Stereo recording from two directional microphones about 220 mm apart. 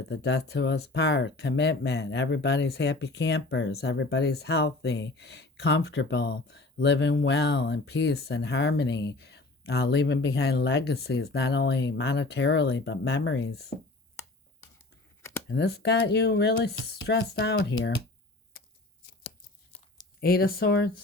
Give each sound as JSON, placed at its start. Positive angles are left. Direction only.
{"t": 0.0, "sound": "speech", "side_deg": 50}
{"t": 15.4, "sound": "speech", "side_deg": 50}
{"t": 18.5, "sound": "a sound", "side_deg": 40}
{"t": 20.2, "sound": "speech", "side_deg": 45}